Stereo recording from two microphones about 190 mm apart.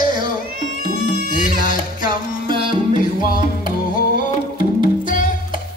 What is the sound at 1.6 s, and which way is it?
Music, 45° left (ahead or behind).